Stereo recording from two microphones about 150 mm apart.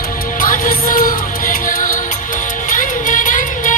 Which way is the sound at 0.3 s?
65° left (ahead or behind).